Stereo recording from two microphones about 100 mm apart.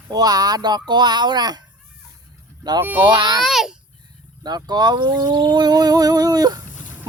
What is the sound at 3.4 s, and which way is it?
Speech, centre (ahead or behind).